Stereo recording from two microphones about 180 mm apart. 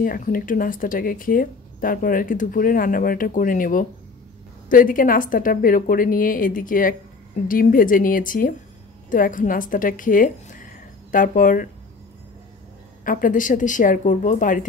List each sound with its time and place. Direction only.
0.0 s speech: 50° left (ahead or behind)
13.0 s speech: 50° left (ahead or behind)